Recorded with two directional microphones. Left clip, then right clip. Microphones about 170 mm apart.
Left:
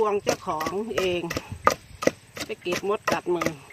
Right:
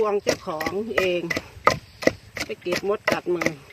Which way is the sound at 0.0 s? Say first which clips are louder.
Right 1 dB; centre (ahead or behind).